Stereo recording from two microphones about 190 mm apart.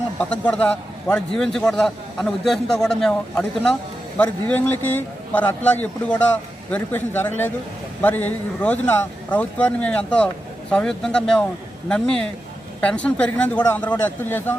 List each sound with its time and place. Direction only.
0.2 s a man's voice: 5° left (ahead or behind)